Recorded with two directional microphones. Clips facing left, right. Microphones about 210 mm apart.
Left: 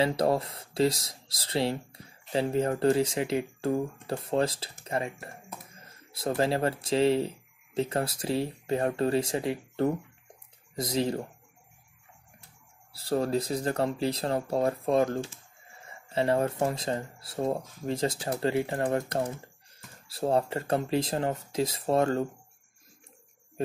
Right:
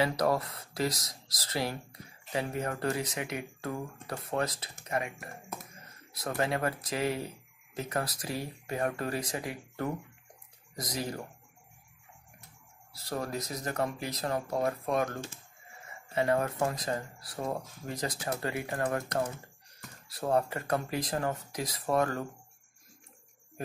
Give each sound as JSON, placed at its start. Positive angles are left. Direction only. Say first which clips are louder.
{"t": 0.0, "sound": "speech", "louder": "left 3 dB", "side_deg": 30}
{"t": 12.9, "sound": "speech", "louder": "left 8 dB", "side_deg": 30}
{"t": 16.1, "sound": "speech", "louder": "left 3 dB", "side_deg": 30}